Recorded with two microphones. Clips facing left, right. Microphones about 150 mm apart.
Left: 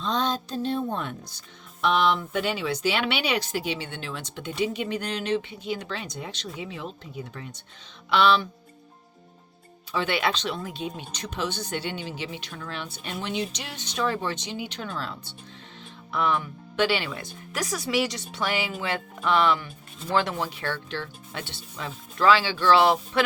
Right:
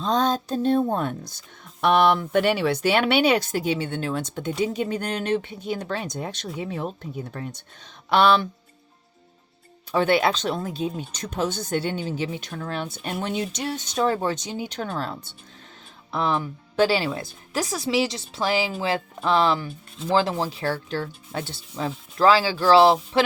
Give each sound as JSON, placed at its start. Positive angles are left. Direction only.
{"t": 0.0, "sound": "speech", "side_deg": -40}
{"t": 1.8, "sound": "speech", "side_deg": -60}
{"t": 9.9, "sound": "speech", "side_deg": -45}
{"t": 11.1, "sound": "speech", "side_deg": -45}
{"t": 16.1, "sound": "speech", "side_deg": -30}